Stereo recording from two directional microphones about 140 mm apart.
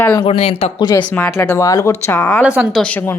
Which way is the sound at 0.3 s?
45° left (ahead or behind).